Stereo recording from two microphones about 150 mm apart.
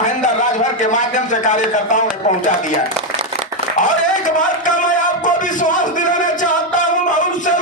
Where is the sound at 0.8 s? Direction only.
55° left (ahead or behind).